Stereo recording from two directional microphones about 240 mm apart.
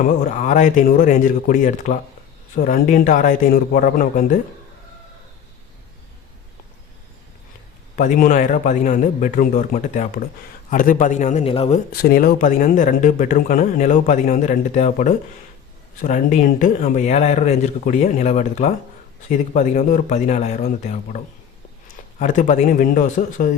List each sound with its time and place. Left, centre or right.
0.0 s speech: left
7.9 s speech: left
11.9 s speech: left
22.2 s speech: left